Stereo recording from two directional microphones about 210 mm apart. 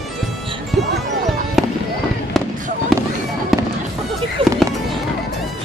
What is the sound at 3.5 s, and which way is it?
Fireworks, centre (ahead or behind).